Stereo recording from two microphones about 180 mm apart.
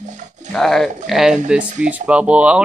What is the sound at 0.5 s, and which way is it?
Speech, centre (ahead or behind).